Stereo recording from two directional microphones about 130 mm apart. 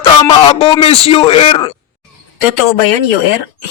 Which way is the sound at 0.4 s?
40° left (ahead or behind).